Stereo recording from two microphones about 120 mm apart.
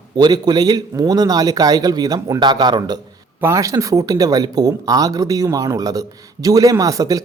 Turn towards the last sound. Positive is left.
turn(degrees=-30)  # may be behind; listen again after turning